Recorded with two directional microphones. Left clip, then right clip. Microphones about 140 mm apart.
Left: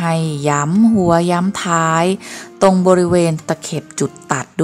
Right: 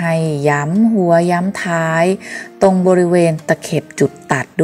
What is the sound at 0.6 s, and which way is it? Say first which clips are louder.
Speech: even; 30° left (ahead or behind).